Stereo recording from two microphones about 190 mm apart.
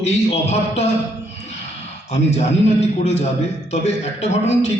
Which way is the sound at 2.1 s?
35° left (ahead or behind).